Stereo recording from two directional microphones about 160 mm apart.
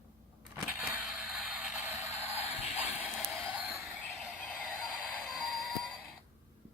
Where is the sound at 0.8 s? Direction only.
Centre (ahead or behind).